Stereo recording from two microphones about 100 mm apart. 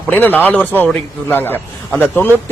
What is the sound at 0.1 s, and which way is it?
Speech, 15° left (ahead or behind).